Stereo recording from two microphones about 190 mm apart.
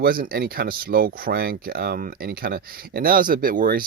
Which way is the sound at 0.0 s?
50° right (ahead or behind).